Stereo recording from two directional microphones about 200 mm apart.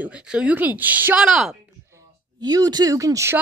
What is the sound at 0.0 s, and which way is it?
Speech, 5° right (ahead or behind).